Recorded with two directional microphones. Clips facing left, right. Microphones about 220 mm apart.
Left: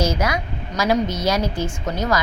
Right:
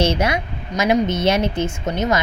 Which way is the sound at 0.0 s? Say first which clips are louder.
Right 3 dB; 25° right (ahead or behind).